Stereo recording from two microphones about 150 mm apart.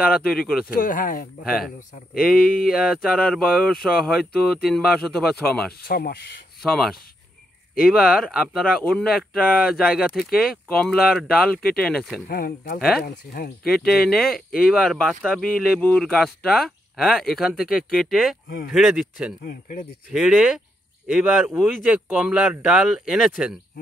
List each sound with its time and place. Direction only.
0.3 s speech: 5° left (ahead or behind)
0.7 s speech: 65° left (ahead or behind)
2.1 s speech: 75° left (ahead or behind)
2.7 s speech: centre (ahead or behind)
5.9 s speech: 90° left
6.6 s speech: centre (ahead or behind)
12.3 s speech: 80° left
13.8 s speech: 5° left (ahead or behind)